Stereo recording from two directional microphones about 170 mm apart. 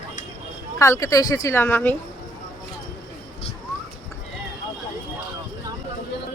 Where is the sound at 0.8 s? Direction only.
20° left (ahead or behind).